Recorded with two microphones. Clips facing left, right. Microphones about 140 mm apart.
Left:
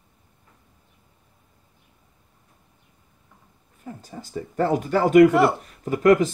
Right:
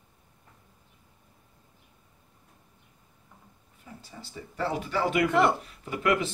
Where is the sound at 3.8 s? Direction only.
45° left (ahead or behind).